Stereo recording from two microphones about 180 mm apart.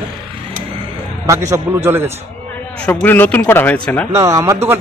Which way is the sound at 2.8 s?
10° left (ahead or behind).